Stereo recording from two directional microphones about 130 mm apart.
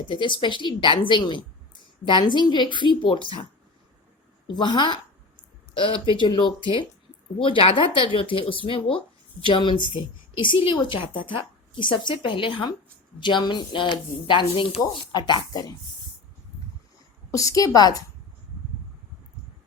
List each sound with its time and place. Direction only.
0.1 s a woman's voice: 40° left (ahead or behind)
4.4 s a woman's voice: 35° left (ahead or behind)
17.3 s a woman's voice: 25° left (ahead or behind)